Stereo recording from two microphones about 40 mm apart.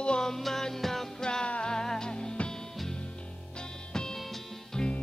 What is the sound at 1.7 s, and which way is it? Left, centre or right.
Music, centre.